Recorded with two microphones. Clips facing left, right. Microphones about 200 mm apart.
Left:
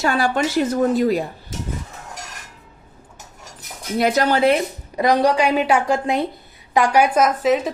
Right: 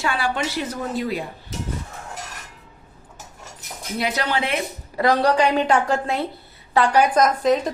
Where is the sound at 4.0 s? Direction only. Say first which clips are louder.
Left 7 dB; 45° left (ahead or behind).